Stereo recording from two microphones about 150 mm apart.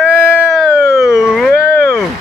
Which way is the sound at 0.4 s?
Centre (ahead or behind).